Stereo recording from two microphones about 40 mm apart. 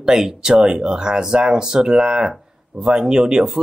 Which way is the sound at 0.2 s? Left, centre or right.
Centre.